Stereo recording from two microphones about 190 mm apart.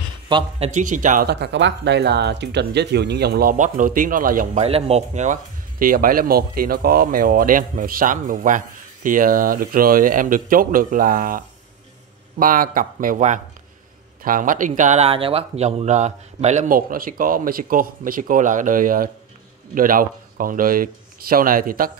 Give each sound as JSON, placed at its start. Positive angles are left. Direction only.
{"t": 0.3, "sound": "speech", "side_deg": -25}
{"t": 0.7, "sound": "speech", "side_deg": -40}
{"t": 1.2, "sound": "speech", "side_deg": -65}
{"t": 4.6, "sound": "speech", "side_deg": -30}